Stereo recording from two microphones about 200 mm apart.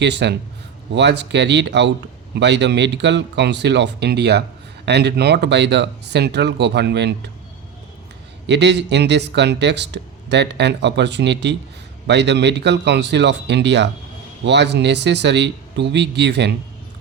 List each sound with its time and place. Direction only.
0.0 s speech: 60° right (ahead or behind)
8.4 s speech: 60° right (ahead or behind)